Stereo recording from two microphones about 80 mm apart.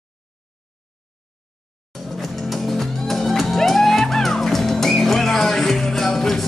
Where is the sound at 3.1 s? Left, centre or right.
Centre.